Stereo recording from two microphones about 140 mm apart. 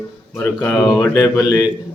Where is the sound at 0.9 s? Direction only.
25° left (ahead or behind).